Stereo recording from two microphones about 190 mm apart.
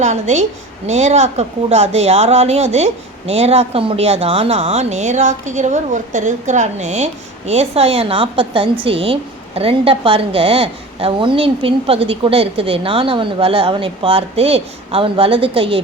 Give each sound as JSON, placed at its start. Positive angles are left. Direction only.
{"t": 0.0, "sound": "a woman's voice", "side_deg": -35}